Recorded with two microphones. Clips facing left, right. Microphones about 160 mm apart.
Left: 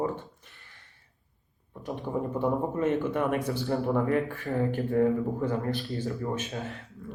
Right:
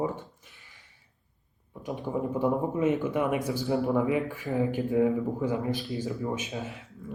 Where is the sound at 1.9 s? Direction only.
5° right (ahead or behind).